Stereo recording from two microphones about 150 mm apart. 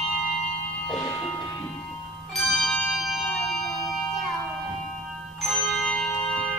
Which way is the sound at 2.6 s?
5° left (ahead or behind).